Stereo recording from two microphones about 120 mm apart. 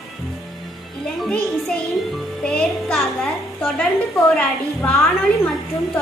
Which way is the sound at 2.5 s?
5° left (ahead or behind).